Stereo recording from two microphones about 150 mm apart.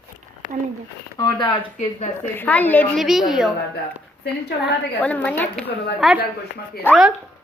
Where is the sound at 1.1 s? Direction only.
30° left (ahead or behind).